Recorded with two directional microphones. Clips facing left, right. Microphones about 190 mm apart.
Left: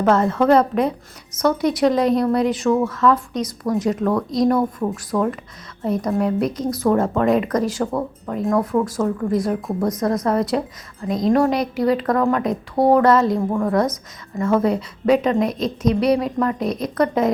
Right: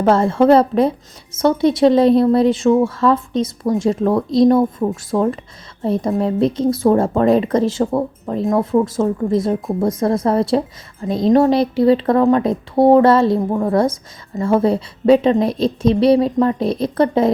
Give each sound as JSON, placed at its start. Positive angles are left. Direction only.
{"t": 0.0, "sound": "speech", "side_deg": -30}